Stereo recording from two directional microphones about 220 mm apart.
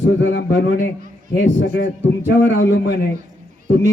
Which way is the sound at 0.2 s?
55° left (ahead or behind).